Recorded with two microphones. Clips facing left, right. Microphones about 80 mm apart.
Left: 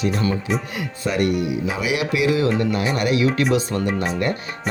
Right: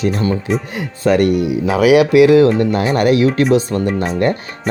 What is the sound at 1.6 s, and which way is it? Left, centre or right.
Speech, right.